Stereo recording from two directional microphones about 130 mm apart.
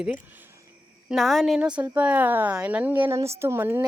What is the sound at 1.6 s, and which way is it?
A woman's voice, 10° right (ahead or behind).